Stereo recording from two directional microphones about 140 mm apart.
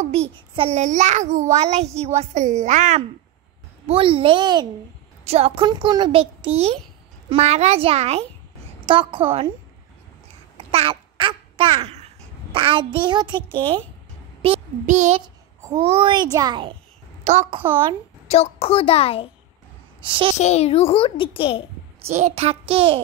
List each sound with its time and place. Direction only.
0.1 s a child's voice: 50° right (ahead or behind)
3.8 s a child's voice: 40° right (ahead or behind)
5.2 s a child's voice: 45° right (ahead or behind)
5.7 s a child's voice: 30° right (ahead or behind)
10.7 s babbling: 40° right (ahead or behind)
12.5 s a child's voice: 35° right (ahead or behind)
14.9 s a child's voice: 55° right (ahead or behind)
15.2 s a child's voice: 30° right (ahead or behind)
17.2 s a sound: 55° right (ahead or behind)
18.3 s a child's voice: 45° left (ahead or behind)
20.0 s a child's voice: 40° right (ahead or behind)
20.3 s a child's voice: 50° left (ahead or behind)
22.0 s a child's voice: 50° right (ahead or behind)